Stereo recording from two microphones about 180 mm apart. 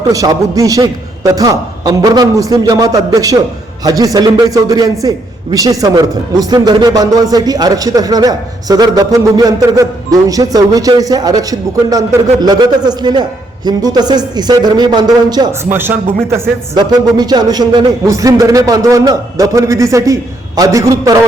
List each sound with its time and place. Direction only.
0.1 s a man's voice: 20° right (ahead or behind)